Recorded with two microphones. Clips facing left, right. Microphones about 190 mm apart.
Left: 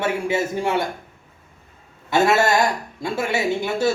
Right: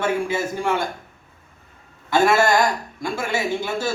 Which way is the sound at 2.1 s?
25° left (ahead or behind).